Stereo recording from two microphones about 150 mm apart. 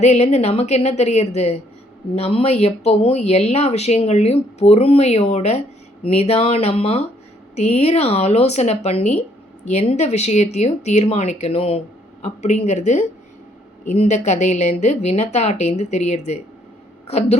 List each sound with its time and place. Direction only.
0.0 s speech: 45° left (ahead or behind)